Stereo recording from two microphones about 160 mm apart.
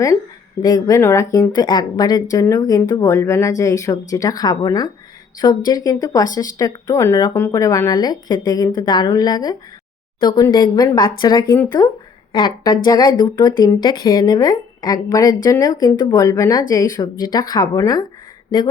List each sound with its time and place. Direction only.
0.6 s speech: 20° left (ahead or behind)